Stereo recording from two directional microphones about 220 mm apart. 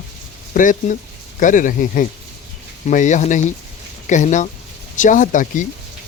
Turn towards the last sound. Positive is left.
turn(degrees=35)  # may be behind; listen again after turning